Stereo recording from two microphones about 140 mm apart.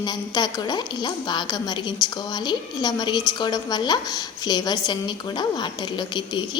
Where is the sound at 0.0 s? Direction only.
30° left (ahead or behind).